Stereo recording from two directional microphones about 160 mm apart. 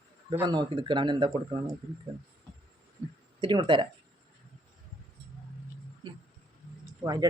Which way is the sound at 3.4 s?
30° right (ahead or behind).